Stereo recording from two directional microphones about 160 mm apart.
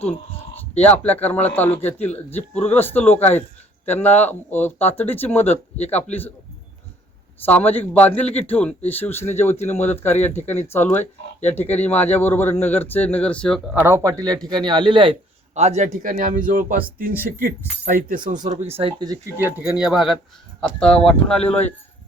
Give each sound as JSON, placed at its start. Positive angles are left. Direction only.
{"t": 0.8, "sound": "speech", "side_deg": 10}
{"t": 7.4, "sound": "speech", "side_deg": 10}
{"t": 11.0, "sound": "speech", "side_deg": 45}
{"t": 11.5, "sound": "speech", "side_deg": 10}
{"t": 13.8, "sound": "a man's voice", "side_deg": -20}
{"t": 18.3, "sound": "speech", "side_deg": -50}
{"t": 18.8, "sound": "speech", "side_deg": -30}